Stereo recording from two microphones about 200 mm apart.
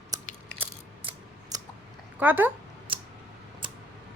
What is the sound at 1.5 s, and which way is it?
Chewing, 20° right (ahead or behind).